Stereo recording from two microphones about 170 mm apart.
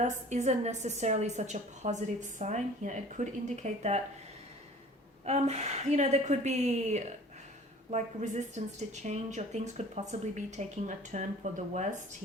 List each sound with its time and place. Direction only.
0.0 s speech: 40° right (ahead or behind)
5.2 s a woman's voice: 40° right (ahead or behind)